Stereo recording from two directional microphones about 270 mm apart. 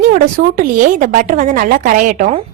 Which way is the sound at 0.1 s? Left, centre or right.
Right.